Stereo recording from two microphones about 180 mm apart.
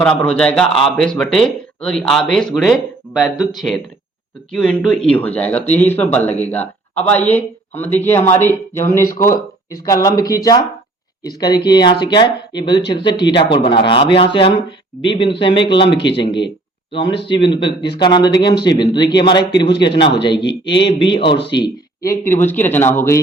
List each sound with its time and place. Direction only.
0.0 s a man's voice: 5° left (ahead or behind)
9.0 s speech: 45° left (ahead or behind)
9.8 s speech: 20° left (ahead or behind)